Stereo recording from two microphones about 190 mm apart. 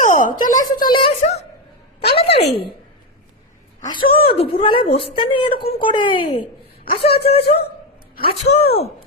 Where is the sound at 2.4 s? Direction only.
60° left (ahead or behind).